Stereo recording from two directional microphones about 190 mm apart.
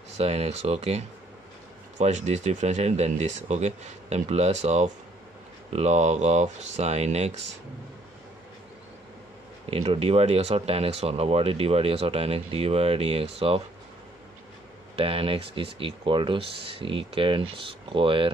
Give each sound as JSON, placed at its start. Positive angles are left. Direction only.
{"t": 0.2, "sound": "speech", "side_deg": -35}
{"t": 9.7, "sound": "speech", "side_deg": -30}
{"t": 15.0, "sound": "speech", "side_deg": -30}